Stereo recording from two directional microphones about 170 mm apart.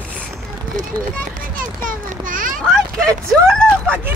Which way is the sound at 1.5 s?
55° right (ahead or behind).